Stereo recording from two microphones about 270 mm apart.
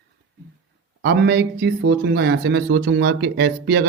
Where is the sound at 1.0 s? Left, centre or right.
Right.